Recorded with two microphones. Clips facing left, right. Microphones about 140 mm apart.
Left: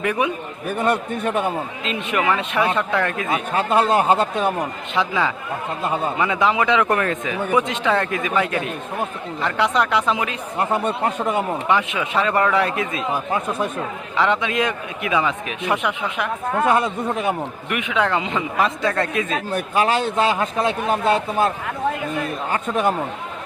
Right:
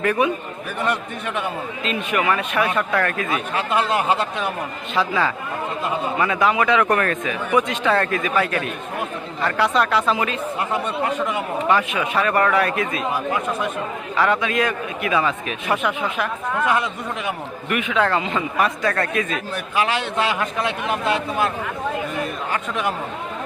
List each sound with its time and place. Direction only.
0.0 s speech: 15° left (ahead or behind)
0.8 s a man's voice: 45° left (ahead or behind)
1.8 s a man's voice: 20° left (ahead or behind)
3.5 s a man's voice: 40° left (ahead or behind)
4.9 s a man's voice: 15° left (ahead or behind)
10.6 s a man's voice: 40° left (ahead or behind)
11.7 s a man's voice: 20° left (ahead or behind)
16.6 s a man's voice: 40° left (ahead or behind)
17.7 s a man's voice: 20° left (ahead or behind)
19.5 s a man's voice: 40° left (ahead or behind)
22.5 s a man's voice: 40° left (ahead or behind)